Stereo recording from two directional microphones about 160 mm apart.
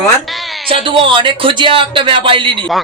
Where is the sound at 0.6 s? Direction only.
35° right (ahead or behind).